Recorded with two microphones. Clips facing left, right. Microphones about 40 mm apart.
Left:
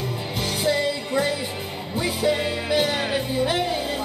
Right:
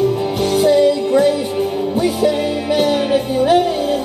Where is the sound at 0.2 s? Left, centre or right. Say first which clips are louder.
Right 11 dB; right.